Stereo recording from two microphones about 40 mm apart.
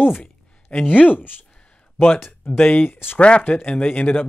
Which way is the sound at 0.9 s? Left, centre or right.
Left.